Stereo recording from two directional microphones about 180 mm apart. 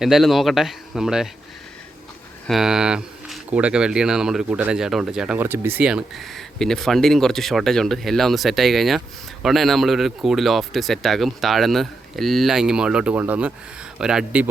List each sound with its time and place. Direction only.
0.0 s speech: centre (ahead or behind)
2.5 s speech: centre (ahead or behind)